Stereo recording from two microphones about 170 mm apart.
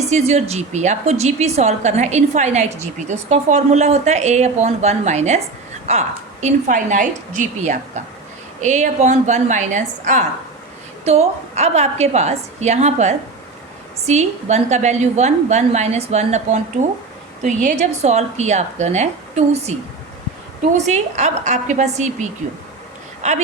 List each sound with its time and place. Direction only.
0.1 s a woman's voice: 40° right (ahead or behind)
20.7 s a woman's voice: 45° right (ahead or behind)